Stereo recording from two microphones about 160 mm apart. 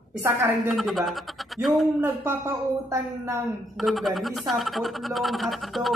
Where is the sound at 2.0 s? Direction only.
15° right (ahead or behind).